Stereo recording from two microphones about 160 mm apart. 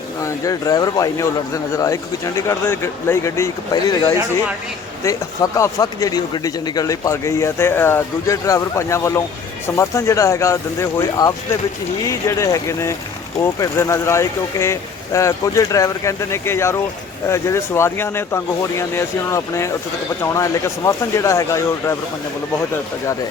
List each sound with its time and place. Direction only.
0.3 s speech: 20° left (ahead or behind)